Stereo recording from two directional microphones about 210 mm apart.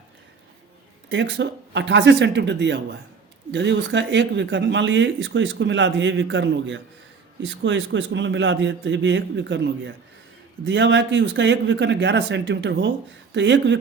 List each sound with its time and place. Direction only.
1.1 s speech: 60° right (ahead or behind)